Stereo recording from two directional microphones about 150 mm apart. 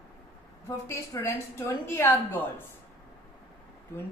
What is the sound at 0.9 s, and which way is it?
A woman's voice, 20° left (ahead or behind).